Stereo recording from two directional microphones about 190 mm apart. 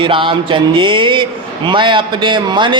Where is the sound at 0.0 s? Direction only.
25° right (ahead or behind).